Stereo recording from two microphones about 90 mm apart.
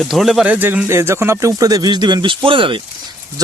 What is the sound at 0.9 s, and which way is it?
Speech, 30° right (ahead or behind).